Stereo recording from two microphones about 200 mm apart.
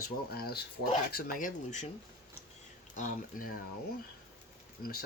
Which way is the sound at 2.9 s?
40° left (ahead or behind).